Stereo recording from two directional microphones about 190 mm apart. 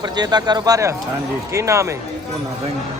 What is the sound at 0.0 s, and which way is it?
A man's voice, 20° right (ahead or behind).